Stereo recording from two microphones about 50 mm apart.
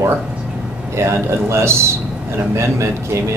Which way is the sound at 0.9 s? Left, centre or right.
Right.